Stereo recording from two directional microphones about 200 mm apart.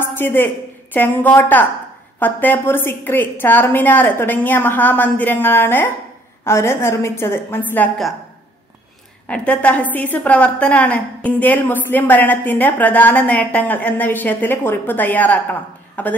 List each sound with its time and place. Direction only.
0.0 s a sound: 10° left (ahead or behind)
0.9 s a woman's voice: 10° left (ahead or behind)
9.3 s a woman's voice: 5° left (ahead or behind)